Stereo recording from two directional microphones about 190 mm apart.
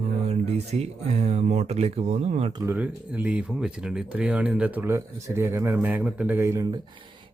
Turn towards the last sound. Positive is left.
turn(degrees=-15)  # may be behind; listen again after turning